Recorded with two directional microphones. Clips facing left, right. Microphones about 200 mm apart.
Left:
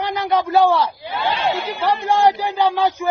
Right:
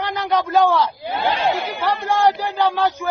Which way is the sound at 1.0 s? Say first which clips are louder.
Right 1 dB; 50° right (ahead or behind).